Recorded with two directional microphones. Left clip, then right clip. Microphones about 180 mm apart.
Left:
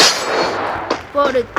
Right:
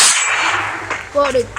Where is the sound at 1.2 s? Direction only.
20° left (ahead or behind).